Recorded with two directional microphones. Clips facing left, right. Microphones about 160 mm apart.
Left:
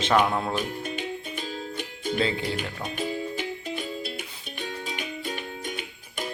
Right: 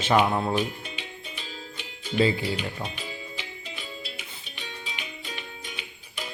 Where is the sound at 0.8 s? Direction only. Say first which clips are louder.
Left 8 dB; 45° left (ahead or behind).